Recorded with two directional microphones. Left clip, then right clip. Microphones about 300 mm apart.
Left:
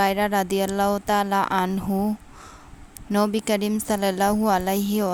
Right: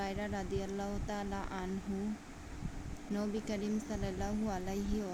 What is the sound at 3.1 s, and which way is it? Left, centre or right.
Speech, left.